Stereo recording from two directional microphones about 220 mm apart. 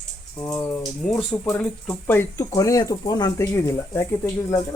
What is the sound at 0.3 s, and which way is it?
Speech, 10° left (ahead or behind).